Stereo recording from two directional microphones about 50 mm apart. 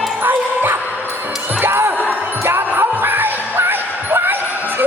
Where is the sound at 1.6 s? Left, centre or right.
Right.